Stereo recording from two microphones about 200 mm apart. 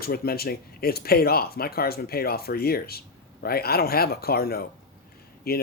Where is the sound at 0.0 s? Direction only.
50° left (ahead or behind).